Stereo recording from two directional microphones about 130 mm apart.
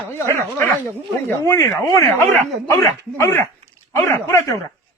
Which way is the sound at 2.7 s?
20° left (ahead or behind).